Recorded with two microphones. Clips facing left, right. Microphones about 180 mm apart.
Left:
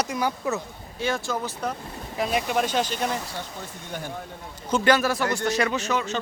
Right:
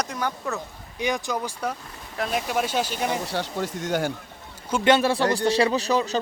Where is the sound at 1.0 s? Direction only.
15° right (ahead or behind).